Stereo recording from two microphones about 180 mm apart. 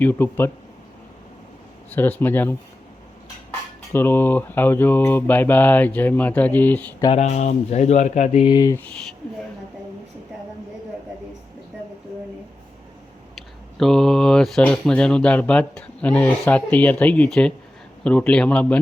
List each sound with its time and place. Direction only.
0.0 s mantra: 10° left (ahead or behind)
2.0 s mantra: 10° left (ahead or behind)
3.9 s mantra: 10° left (ahead or behind)
7.2 s speech: 40° left (ahead or behind); by 8.9 s 15° left (ahead or behind)
13.3 s speech: centre (ahead or behind)